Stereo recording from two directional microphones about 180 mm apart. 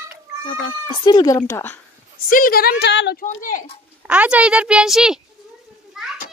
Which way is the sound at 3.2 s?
50° left (ahead or behind).